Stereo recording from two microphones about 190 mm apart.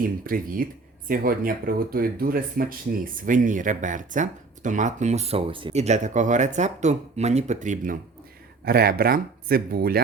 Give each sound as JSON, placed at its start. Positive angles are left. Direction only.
{"t": 0.3, "sound": "speech", "side_deg": -50}
{"t": 8.6, "sound": "speech", "side_deg": -55}